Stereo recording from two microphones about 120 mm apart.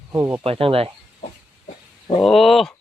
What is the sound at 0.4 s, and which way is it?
Speech, 50° right (ahead or behind).